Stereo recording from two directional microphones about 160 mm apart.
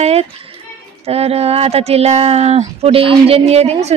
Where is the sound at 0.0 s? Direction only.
40° right (ahead or behind).